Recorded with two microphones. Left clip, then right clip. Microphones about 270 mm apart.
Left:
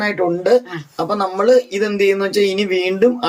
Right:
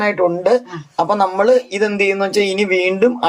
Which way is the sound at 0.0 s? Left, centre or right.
Centre.